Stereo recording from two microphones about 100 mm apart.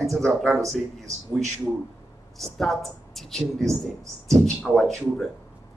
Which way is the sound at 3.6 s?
30° right (ahead or behind).